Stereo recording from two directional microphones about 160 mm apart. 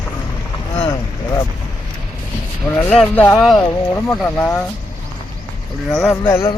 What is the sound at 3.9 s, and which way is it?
Speech, 15° left (ahead or behind).